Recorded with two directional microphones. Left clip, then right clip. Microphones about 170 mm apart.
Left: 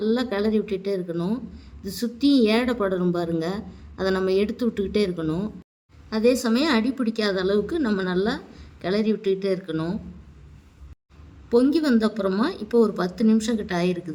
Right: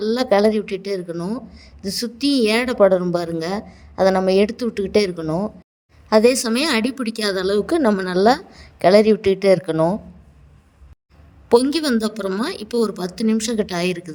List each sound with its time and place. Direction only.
0.0 s a woman's voice: 40° right (ahead or behind)
1.1 s speech: 20° right (ahead or behind)
1.5 s a woman's voice: 35° right (ahead or behind)
5.2 s speech: 20° right (ahead or behind)
6.1 s a woman's voice: 50° right (ahead or behind)
9.7 s speech: 25° right (ahead or behind)
11.7 s a woman's voice: 50° right (ahead or behind)